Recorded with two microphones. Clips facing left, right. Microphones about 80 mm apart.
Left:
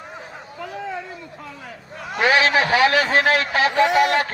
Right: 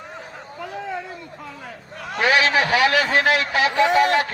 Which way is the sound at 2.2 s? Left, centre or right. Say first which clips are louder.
Left 1 dB; left.